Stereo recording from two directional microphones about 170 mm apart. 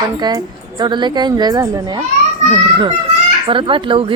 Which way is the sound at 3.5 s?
30° right (ahead or behind).